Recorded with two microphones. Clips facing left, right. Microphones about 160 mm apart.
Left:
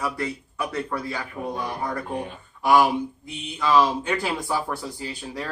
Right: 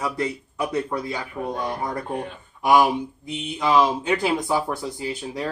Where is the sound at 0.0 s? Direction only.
20° right (ahead or behind).